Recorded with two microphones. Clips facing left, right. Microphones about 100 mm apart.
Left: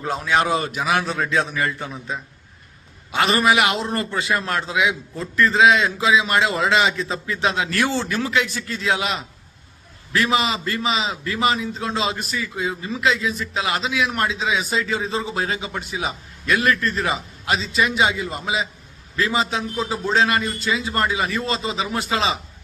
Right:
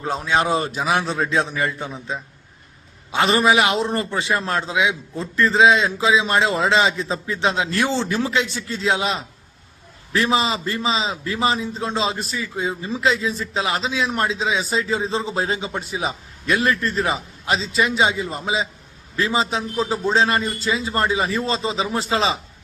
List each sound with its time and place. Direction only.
0.0 s a man's voice: 30° right (ahead or behind)
3.1 s a man's voice: 25° right (ahead or behind)
19.8 s speech: centre (ahead or behind)
20.1 s a man's voice: 30° right (ahead or behind)